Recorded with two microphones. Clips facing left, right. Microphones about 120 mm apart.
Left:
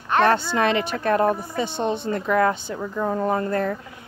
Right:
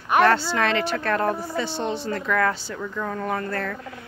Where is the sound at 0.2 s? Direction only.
20° left (ahead or behind).